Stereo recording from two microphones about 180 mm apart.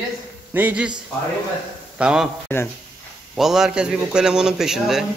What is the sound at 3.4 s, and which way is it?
A man's voice, centre (ahead or behind).